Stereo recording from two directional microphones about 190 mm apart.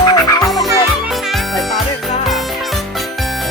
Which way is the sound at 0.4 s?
Centre (ahead or behind).